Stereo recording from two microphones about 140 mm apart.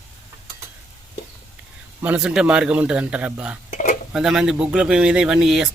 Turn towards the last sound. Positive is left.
turn(degrees=-5)  # may be behind; listen again after turning